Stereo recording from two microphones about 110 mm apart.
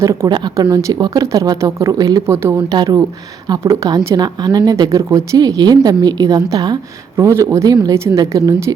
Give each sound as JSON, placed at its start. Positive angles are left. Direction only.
{"t": 0.0, "sound": "speech", "side_deg": -25}
{"t": 0.3, "sound": "speech", "side_deg": -40}
{"t": 2.6, "sound": "speech", "side_deg": -40}
{"t": 3.6, "sound": "speech", "side_deg": -30}
{"t": 7.2, "sound": "speech", "side_deg": -25}